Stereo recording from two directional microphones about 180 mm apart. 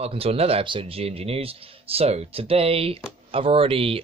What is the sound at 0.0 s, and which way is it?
Speech, 35° right (ahead or behind).